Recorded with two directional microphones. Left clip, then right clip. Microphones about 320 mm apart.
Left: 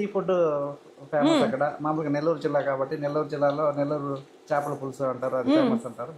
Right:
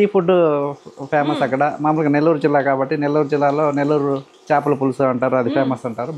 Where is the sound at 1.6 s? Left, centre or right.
Right.